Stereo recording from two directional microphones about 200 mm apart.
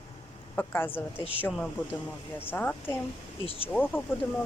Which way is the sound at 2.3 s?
10° left (ahead or behind).